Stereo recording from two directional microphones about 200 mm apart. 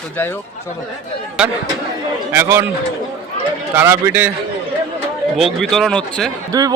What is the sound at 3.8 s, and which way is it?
Speech, 10° right (ahead or behind).